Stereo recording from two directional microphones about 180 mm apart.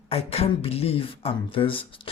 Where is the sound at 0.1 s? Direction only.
35° left (ahead or behind).